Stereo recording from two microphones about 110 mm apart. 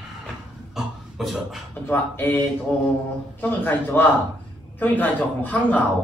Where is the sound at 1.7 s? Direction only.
15° left (ahead or behind).